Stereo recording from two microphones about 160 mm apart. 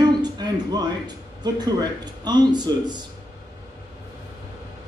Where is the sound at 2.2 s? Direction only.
25° right (ahead or behind).